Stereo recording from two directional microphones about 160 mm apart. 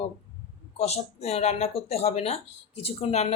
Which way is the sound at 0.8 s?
40° left (ahead or behind).